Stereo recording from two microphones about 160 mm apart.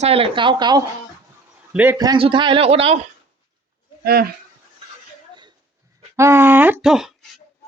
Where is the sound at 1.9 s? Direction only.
25° right (ahead or behind).